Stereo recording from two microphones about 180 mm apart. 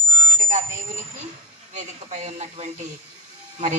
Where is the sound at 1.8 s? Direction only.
40° right (ahead or behind).